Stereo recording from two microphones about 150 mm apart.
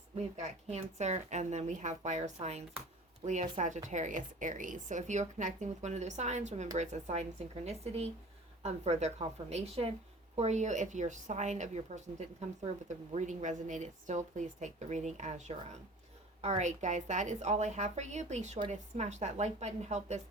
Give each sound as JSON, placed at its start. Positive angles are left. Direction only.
{"t": 0.2, "sound": "a woman's voice", "side_deg": -50}